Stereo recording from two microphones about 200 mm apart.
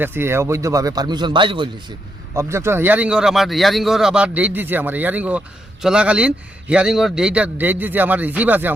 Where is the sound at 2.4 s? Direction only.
15° right (ahead or behind).